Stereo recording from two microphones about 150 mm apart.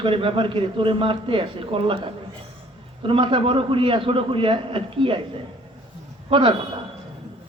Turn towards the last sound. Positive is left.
turn(degrees=-35)  # may be behind; listen again after turning